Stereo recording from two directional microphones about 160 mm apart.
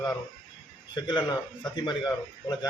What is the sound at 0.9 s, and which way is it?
Speech, 30° left (ahead or behind).